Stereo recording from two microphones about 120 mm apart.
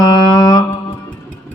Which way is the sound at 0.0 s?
30° left (ahead or behind).